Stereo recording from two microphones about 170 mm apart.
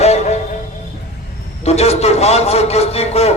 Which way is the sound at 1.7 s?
40° left (ahead or behind).